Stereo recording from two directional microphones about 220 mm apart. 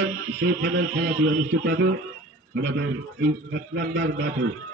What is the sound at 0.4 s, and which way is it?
A man's voice, 50° right (ahead or behind).